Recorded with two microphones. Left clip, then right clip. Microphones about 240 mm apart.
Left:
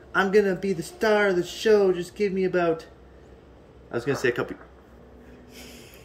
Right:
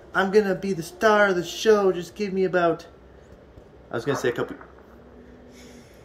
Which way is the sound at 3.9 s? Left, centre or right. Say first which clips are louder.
Even; centre.